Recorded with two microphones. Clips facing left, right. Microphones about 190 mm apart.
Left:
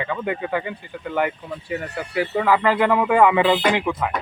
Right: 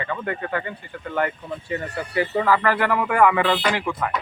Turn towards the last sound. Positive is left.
turn(degrees=20)  # may be behind; listen again after turning